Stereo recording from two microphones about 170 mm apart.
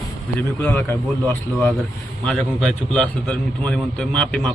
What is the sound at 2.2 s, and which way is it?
A man's voice, 5° left (ahead or behind).